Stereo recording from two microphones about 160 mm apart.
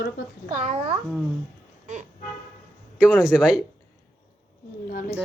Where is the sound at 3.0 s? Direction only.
10° right (ahead or behind).